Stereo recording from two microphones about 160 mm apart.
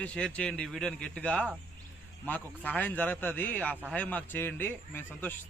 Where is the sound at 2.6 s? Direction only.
10° left (ahead or behind).